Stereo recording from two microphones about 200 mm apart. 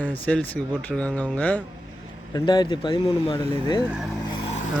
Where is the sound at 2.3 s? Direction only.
20° left (ahead or behind).